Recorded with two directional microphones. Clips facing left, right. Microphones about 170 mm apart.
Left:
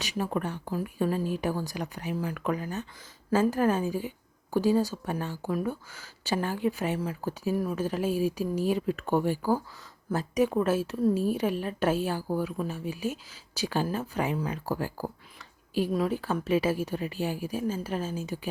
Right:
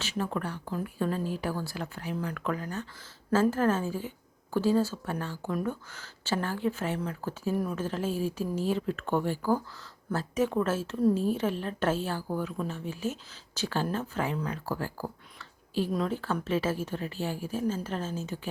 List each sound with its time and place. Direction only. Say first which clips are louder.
0.0 s a woman's voice: left 2 dB; 15° left (ahead or behind)